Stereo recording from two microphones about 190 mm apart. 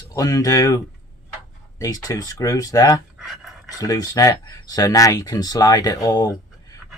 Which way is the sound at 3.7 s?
20° left (ahead or behind).